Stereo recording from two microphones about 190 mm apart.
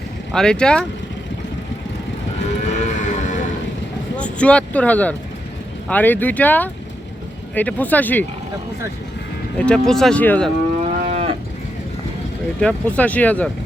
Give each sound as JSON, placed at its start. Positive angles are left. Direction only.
{"t": 0.3, "sound": "speech", "side_deg": 5}
{"t": 2.6, "sound": "horse", "side_deg": 40}
{"t": 4.2, "sound": "speech", "side_deg": 5}
{"t": 9.6, "sound": "speech", "side_deg": 5}
{"t": 11.0, "sound": "moo", "side_deg": -35}
{"t": 12.5, "sound": "speech", "side_deg": 5}